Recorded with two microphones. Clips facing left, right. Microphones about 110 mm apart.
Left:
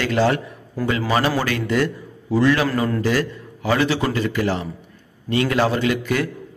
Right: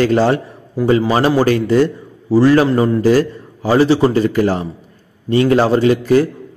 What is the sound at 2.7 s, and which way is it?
Speech, 20° right (ahead or behind).